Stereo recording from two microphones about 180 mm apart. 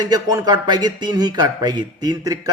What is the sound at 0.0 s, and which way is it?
Speech, 20° right (ahead or behind).